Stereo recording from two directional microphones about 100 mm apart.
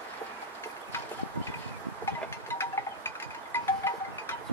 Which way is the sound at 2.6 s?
25° left (ahead or behind).